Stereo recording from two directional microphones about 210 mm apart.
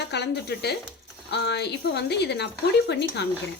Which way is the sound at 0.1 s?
50° left (ahead or behind).